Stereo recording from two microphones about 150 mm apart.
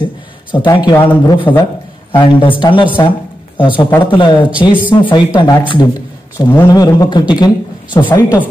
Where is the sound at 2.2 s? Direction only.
35° left (ahead or behind).